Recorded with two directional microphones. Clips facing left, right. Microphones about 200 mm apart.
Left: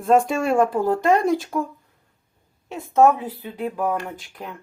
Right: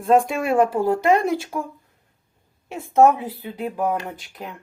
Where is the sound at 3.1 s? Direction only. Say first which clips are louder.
Even; 10° right (ahead or behind).